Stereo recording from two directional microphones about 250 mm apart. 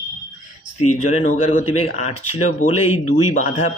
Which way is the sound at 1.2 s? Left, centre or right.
Left.